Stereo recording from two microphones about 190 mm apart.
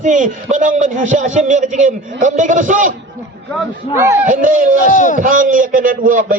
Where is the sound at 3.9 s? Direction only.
15° right (ahead or behind).